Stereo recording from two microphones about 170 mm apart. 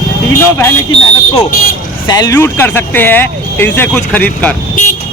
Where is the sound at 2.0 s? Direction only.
25° left (ahead or behind).